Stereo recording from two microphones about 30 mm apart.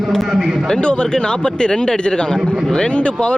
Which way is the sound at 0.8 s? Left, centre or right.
Left.